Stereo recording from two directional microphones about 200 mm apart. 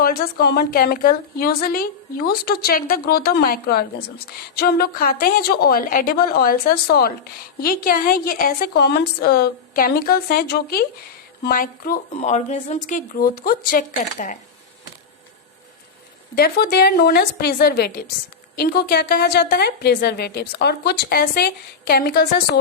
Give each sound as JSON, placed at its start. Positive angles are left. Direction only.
{"t": 0.0, "sound": "a woman's voice", "side_deg": 50}
{"t": 16.3, "sound": "a woman's voice", "side_deg": 50}